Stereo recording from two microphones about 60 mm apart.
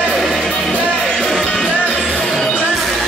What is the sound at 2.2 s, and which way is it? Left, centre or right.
Music, centre.